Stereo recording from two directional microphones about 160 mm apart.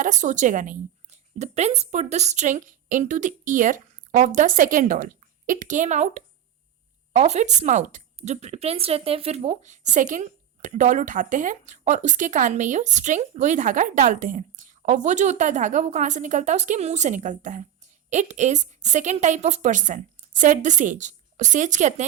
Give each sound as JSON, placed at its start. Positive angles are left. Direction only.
{"t": 0.0, "sound": "speech", "side_deg": -50}